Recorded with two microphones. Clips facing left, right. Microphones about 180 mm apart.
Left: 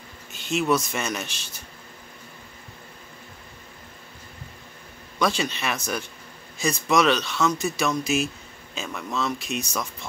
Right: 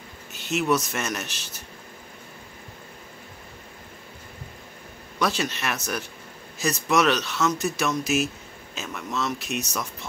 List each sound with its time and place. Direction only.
0.3 s speech: centre (ahead or behind)
5.2 s speech: centre (ahead or behind)